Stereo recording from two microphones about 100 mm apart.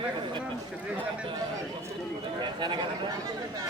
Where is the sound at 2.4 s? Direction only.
50° right (ahead or behind).